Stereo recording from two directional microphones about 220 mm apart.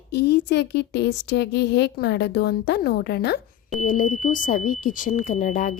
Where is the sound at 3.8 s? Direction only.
40° left (ahead or behind).